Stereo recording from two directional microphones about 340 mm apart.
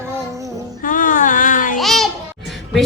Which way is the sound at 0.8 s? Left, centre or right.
Left.